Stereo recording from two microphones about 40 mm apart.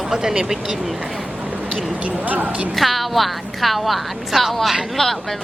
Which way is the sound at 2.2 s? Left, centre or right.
Right.